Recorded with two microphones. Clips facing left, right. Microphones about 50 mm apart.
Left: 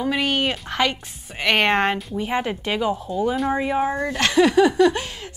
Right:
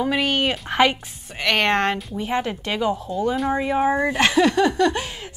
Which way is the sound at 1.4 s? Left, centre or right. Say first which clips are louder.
Left 1 dB; centre.